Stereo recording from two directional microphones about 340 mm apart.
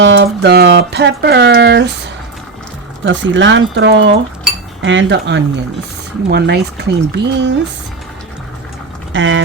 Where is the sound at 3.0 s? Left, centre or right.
Right.